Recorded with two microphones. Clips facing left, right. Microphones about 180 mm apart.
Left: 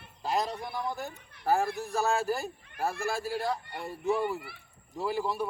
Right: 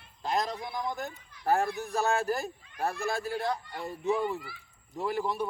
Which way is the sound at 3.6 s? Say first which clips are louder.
Right 1 dB; 60° left (ahead or behind).